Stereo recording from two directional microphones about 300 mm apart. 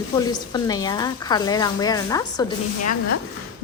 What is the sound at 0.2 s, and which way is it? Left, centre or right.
A woman's voice, centre.